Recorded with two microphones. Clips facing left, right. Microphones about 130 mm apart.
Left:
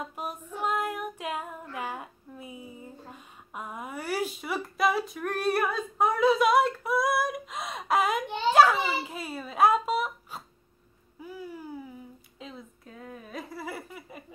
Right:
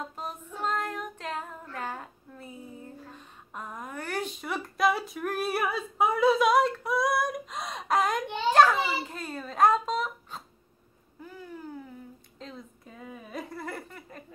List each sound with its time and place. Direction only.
0.1 s female singing: 10° left (ahead or behind)
11.1 s cat: 10° left (ahead or behind)
12.4 s a sound: 5° left (ahead or behind)